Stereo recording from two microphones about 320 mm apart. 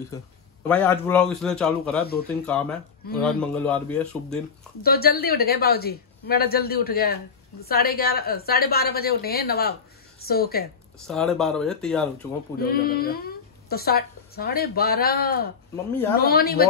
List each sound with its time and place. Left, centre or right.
0.7 s speech: centre
4.8 s a woman's voice: left
11.1 s speech: centre
12.6 s a woman's voice: left